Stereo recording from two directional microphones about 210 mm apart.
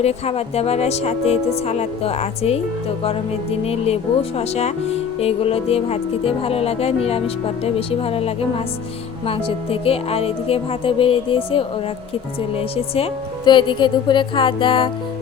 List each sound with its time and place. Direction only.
0.0 s speech: 30° left (ahead or behind)
3.7 s speech: 30° left (ahead or behind)